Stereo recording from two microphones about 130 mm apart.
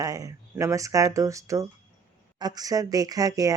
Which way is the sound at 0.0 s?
25° right (ahead or behind).